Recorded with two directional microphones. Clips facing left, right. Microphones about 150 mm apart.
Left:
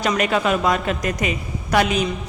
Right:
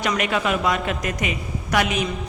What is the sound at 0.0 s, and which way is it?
A man's voice, 40° left (ahead or behind).